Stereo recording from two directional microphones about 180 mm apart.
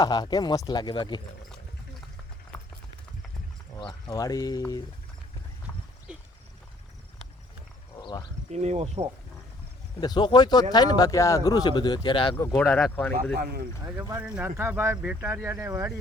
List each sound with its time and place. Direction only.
0.0 s speech: 20° left (ahead or behind)
4.1 s speech: 20° left (ahead or behind)
6.1 s a sound: 5° right (ahead or behind)
7.9 s a sound: 20° left (ahead or behind)
8.4 s speech: 40° right (ahead or behind)
10.0 s speech: 25° left (ahead or behind)
12.5 s speech: 5° left (ahead or behind)
13.8 s speech: 20° right (ahead or behind)